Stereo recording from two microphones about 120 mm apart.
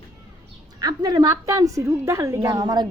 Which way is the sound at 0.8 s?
35° right (ahead or behind).